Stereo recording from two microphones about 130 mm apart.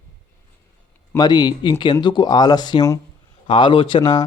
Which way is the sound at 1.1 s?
35° left (ahead or behind).